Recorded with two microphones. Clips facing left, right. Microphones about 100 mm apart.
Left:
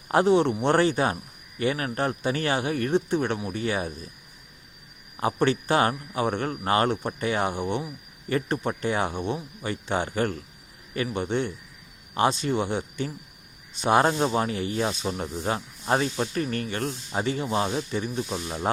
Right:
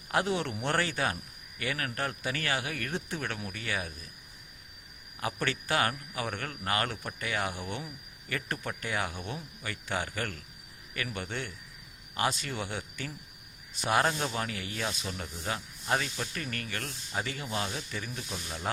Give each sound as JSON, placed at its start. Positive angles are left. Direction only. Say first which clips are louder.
{"t": 0.1, "sound": "speech", "louder": "left 10 dB", "side_deg": 30}
{"t": 5.1, "sound": "speech", "louder": "left 10 dB", "side_deg": 25}